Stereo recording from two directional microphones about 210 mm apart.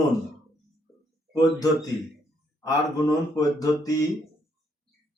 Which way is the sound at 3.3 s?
15° left (ahead or behind).